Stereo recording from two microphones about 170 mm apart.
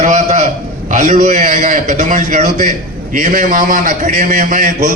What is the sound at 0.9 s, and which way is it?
A man's voice, 50° right (ahead or behind).